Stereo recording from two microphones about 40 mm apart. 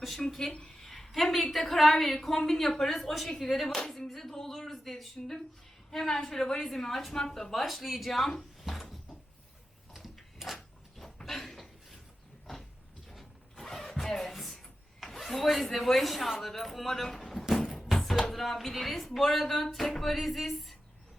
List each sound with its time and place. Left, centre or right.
0.2 s a woman's voice: centre
8.4 s a sound: centre
13.1 s a sound: centre
15.0 s speech: centre
17.7 s music: centre
18.0 s speech: centre